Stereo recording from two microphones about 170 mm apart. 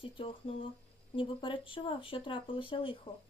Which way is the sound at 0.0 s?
30° left (ahead or behind).